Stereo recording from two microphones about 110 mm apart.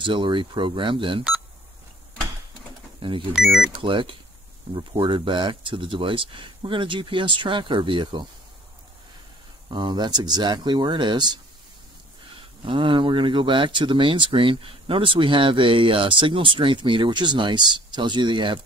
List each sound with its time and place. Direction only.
0.0 s speech: 50° right (ahead or behind)
3.0 s speech: 50° right (ahead or behind)
3.3 s speech: 5° right (ahead or behind)
3.7 s speech: 50° right (ahead or behind)
9.7 s speech: 45° right (ahead or behind)
12.4 s speech: 50° right (ahead or behind)